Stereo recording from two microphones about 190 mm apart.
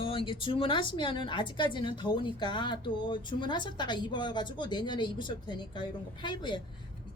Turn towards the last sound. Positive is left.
turn(degrees=25)  # may be behind; listen again after turning